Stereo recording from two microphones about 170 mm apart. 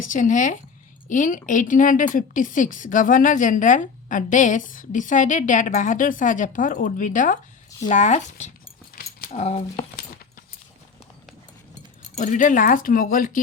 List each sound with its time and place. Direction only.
0.0 s a woman's voice: 50° left (ahead or behind)
8.9 s a sound: 55° left (ahead or behind)
9.3 s speech: 40° left (ahead or behind)
12.1 s a woman's voice: 45° left (ahead or behind)